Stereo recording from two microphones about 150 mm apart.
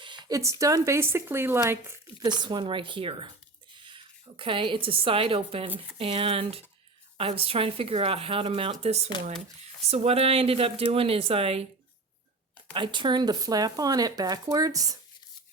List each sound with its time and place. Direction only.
0.0 s a sound: 30° right (ahead or behind)
0.6 s speech: 20° right (ahead or behind)
2.2 s a woman's voice: 30° right (ahead or behind)
12.7 s speech: 35° right (ahead or behind)